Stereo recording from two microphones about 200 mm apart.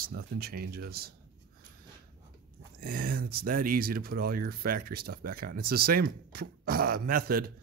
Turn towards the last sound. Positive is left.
turn(degrees=-50)  # may be behind; listen again after turning